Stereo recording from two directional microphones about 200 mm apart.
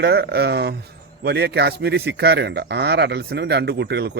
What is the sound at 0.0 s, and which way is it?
Speech, 55° right (ahead or behind).